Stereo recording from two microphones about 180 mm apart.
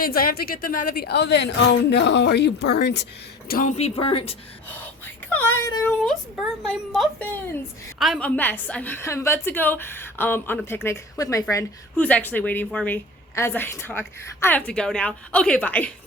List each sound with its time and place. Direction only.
0.0 s a woman's voice: 55° left (ahead or behind)
3.5 s speech: 45° left (ahead or behind)
5.3 s a woman's voice: 10° left (ahead or behind)
6.1 s a woman's voice: centre (ahead or behind)
8.4 s a woman's voice: 10° left (ahead or behind)